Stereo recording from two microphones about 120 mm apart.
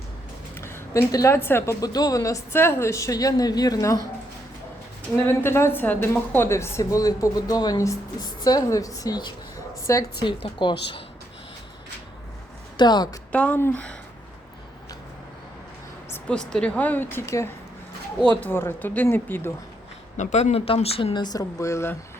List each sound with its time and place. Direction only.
0.6 s a woman's voice: 20° left (ahead or behind)
1.8 s a woman's voice: 30° left (ahead or behind)
5.2 s a woman's voice: 20° left (ahead or behind)
10.2 s speech: 40° left (ahead or behind)
12.7 s speech: 35° left (ahead or behind)
13.3 s speech: 10° left (ahead or behind)
16.3 s speech: 5° left (ahead or behind)
20.1 s speech: 70° left (ahead or behind); by 21.9 s 25° left (ahead or behind)